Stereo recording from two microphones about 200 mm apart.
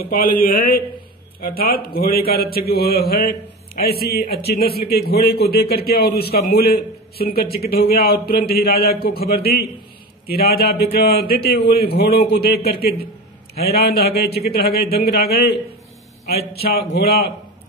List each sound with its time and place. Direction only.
0.0 s a man's voice: 45° left (ahead or behind)
1.9 s a man's voice: 50° left (ahead or behind)